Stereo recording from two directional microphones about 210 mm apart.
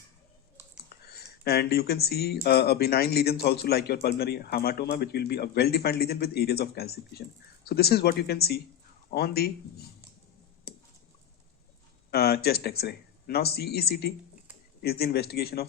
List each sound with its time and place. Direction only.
0.9 s speech: 50° left (ahead or behind)
10.7 s a sound: 50° left (ahead or behind)
12.1 s speech: 45° left (ahead or behind)